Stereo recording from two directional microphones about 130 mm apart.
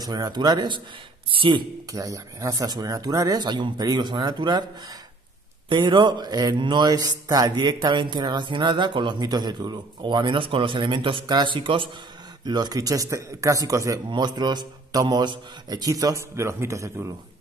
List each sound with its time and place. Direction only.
0.0 s speech: 30° right (ahead or behind)
1.9 s a man's voice: 25° right (ahead or behind)
5.7 s a man's voice: 35° right (ahead or behind)